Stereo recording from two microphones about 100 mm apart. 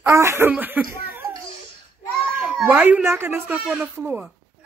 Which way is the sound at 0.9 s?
20° right (ahead or behind).